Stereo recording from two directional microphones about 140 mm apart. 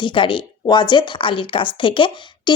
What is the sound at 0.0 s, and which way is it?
A woman's voice, 35° left (ahead or behind).